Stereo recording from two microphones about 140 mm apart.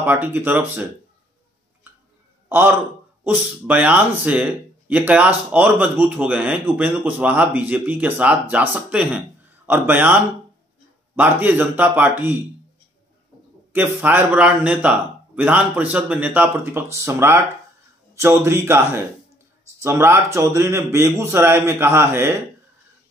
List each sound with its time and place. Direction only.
0.0 s speech: 15° right (ahead or behind)
2.5 s speech: 15° right (ahead or behind)
11.1 s speech: 15° right (ahead or behind)
13.7 s speech: 15° right (ahead or behind)